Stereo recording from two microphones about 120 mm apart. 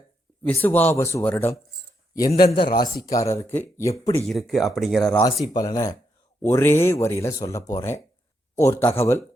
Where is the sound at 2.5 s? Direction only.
35° left (ahead or behind); by 3.9 s 20° left (ahead or behind).